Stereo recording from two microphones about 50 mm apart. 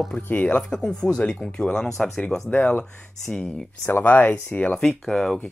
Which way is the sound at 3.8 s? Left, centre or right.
Left.